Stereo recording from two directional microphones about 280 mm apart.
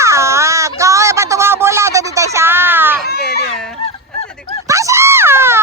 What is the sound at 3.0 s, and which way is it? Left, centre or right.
Baby cry, left.